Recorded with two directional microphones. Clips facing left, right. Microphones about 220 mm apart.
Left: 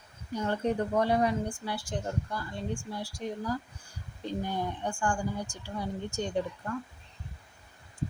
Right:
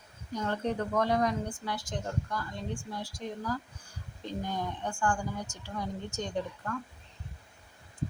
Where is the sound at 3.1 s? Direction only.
10° left (ahead or behind).